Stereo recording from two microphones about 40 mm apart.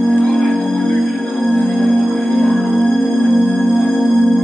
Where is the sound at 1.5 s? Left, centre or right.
Centre.